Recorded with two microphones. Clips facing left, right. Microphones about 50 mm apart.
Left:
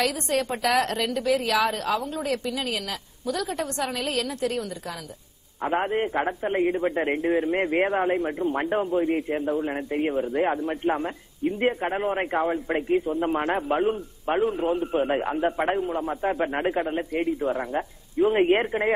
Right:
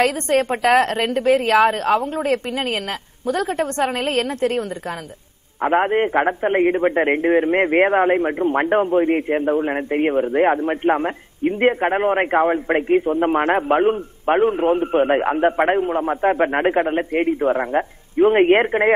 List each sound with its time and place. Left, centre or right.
0.0 s a man's voice: right